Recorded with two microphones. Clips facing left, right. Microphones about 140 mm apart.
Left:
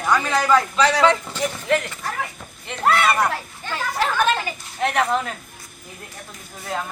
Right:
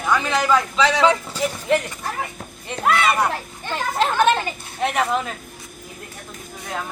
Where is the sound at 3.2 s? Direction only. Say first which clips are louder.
Right 1 dB; 20° right (ahead or behind).